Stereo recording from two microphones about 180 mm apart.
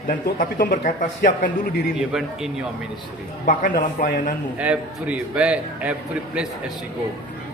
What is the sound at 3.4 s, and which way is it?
Speech, 50° left (ahead or behind).